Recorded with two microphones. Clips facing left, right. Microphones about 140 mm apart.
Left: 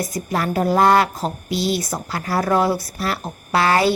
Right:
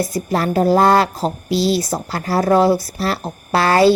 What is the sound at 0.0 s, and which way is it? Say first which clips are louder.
A woman's voice: right 4 dB; 30° right (ahead or behind).